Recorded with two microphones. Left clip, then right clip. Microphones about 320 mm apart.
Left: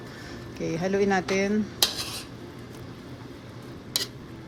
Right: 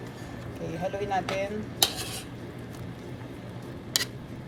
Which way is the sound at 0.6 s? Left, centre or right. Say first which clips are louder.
Left 7 dB; centre.